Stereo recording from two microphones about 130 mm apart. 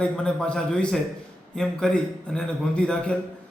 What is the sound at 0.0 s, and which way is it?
A man's voice, 5° left (ahead or behind).